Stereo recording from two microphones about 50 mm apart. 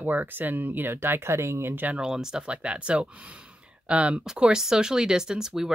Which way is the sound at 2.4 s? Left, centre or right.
Right.